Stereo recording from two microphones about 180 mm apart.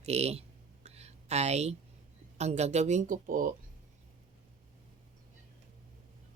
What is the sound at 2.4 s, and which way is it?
Speech, 40° right (ahead or behind).